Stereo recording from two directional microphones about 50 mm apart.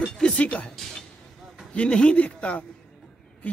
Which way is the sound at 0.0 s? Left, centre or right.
Left.